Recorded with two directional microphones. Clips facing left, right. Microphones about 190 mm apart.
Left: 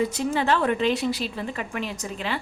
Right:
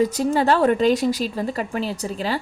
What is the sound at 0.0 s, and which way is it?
A woman's voice, 40° right (ahead or behind).